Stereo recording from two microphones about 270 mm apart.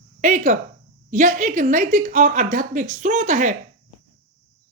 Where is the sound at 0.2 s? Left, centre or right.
Right.